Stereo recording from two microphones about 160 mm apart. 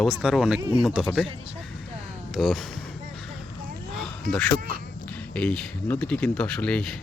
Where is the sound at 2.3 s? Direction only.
Centre (ahead or behind).